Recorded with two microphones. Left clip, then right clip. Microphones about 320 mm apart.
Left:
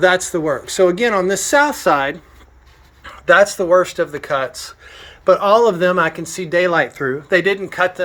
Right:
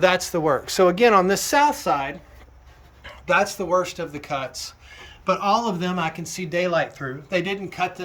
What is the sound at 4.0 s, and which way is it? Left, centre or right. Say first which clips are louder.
Speech: left 9 dB; centre.